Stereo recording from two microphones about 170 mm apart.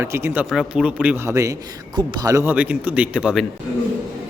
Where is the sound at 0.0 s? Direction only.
15° right (ahead or behind).